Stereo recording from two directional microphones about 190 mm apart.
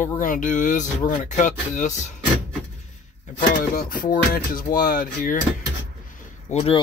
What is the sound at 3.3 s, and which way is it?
Speech, 45° left (ahead or behind).